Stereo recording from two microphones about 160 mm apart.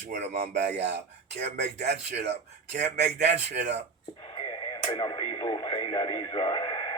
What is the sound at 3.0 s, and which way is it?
Speech, 90° right.